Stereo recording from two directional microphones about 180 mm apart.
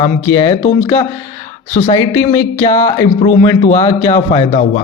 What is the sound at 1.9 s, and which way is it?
Speech, 15° left (ahead or behind).